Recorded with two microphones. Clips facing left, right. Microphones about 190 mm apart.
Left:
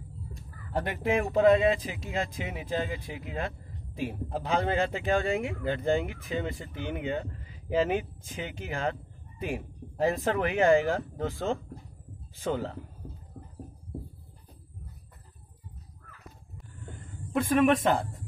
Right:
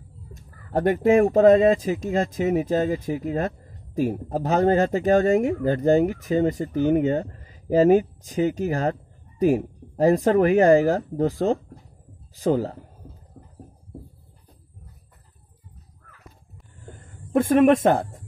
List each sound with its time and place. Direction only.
0.3 s speech: 45° right (ahead or behind)
17.3 s speech: 50° right (ahead or behind)